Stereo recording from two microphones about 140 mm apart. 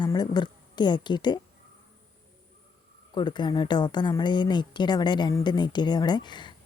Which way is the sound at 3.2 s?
30° left (ahead or behind).